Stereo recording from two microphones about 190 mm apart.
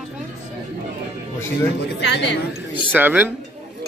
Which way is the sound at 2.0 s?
65° left (ahead or behind).